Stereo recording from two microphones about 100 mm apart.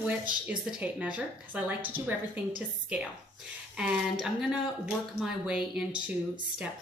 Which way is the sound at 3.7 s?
5° right (ahead or behind).